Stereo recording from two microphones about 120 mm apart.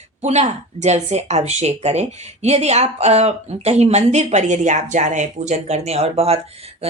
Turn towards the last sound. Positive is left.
turn(degrees=-55)  # may be behind; listen again after turning